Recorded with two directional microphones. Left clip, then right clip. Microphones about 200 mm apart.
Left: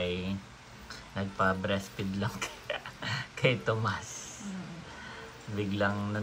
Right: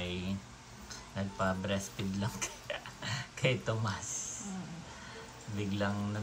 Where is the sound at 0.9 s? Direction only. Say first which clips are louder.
Left 3 dB; 5° right (ahead or behind).